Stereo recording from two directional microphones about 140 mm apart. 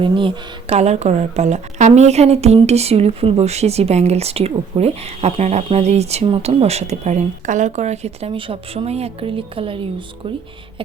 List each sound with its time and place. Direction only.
0.0 s speech: 35° right (ahead or behind)